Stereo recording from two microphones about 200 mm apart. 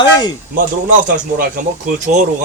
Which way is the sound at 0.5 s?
40° right (ahead or behind).